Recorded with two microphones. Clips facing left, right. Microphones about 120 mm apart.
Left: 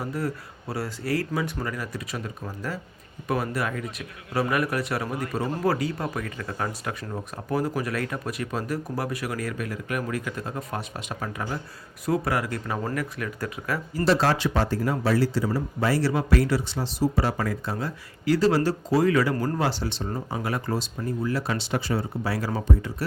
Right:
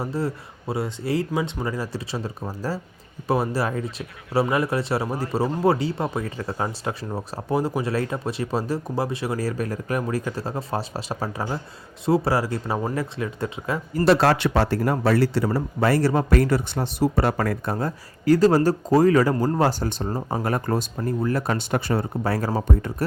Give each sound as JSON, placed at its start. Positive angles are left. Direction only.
{"t": 0.0, "sound": "speech", "side_deg": -30}
{"t": 13.9, "sound": "speech", "side_deg": -60}